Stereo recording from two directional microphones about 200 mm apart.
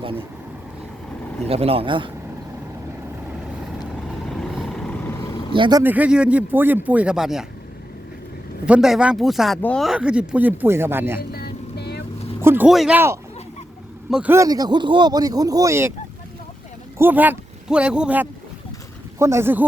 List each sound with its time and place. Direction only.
0.0 s speech: 25° right (ahead or behind)
1.5 s speech: 30° right (ahead or behind)
4.3 s vehicle: centre (ahead or behind)
5.3 s vehicle: 25° left (ahead or behind)
5.5 s speech: 25° right (ahead or behind)
5.8 s speech: 10° right (ahead or behind)
8.6 s speech: 5° right (ahead or behind)
11.2 s vehicle: 50° left (ahead or behind)
12.4 s speech: 10° right (ahead or behind)
17.0 s speech: 10° right (ahead or behind)